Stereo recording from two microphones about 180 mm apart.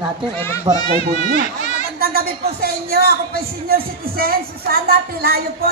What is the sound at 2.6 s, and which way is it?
A woman's voice, 60° right (ahead or behind).